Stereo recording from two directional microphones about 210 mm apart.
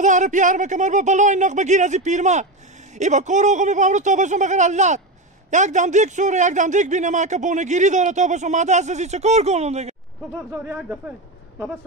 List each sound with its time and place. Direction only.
0.0 s a man's voice: 35° right (ahead or behind)
10.3 s speech: 10° right (ahead or behind)